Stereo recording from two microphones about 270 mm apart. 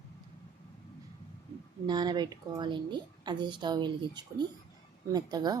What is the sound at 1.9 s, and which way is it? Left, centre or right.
A woman's voice, centre.